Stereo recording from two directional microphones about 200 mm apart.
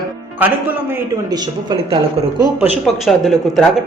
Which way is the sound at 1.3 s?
20° right (ahead or behind).